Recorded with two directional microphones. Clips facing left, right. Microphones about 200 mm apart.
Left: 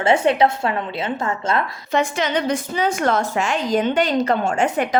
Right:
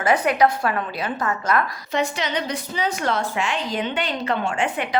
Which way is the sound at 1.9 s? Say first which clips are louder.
Left 5 dB; 50° left (ahead or behind).